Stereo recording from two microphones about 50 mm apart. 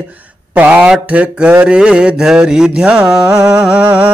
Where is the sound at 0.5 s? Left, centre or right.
Right.